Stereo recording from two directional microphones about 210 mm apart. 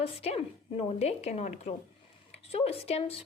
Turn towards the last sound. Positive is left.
turn(degrees=30)  # may be behind; listen again after turning